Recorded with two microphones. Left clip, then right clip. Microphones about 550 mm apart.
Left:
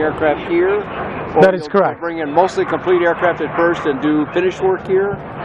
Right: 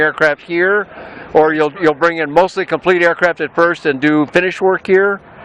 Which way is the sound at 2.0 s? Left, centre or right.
Right.